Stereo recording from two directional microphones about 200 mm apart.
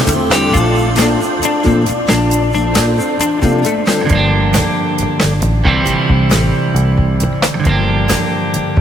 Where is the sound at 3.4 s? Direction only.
Centre (ahead or behind).